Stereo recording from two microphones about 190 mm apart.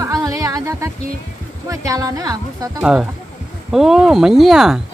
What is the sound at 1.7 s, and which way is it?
Speech, 15° right (ahead or behind).